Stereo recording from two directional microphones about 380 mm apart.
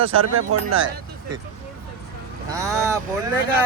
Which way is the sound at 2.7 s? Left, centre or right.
Centre.